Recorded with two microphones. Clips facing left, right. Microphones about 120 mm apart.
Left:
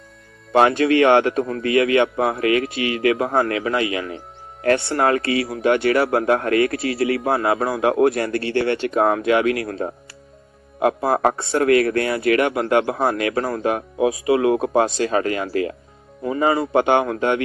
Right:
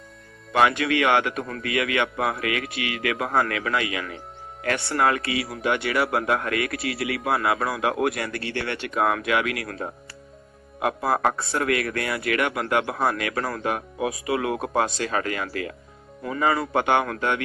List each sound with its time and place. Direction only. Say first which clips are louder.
0.5 s a man's voice: left 6 dB; 30° left (ahead or behind)